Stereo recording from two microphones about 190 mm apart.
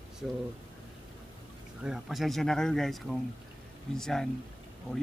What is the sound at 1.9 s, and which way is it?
Speech, centre (ahead or behind).